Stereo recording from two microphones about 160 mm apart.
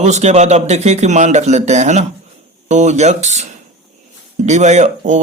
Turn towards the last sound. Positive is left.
turn(degrees=-50)  # may be behind; listen again after turning